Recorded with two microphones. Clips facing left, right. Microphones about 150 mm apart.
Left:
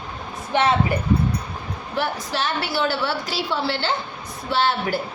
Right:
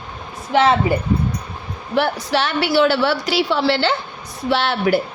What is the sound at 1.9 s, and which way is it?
A woman's voice, 75° right (ahead or behind).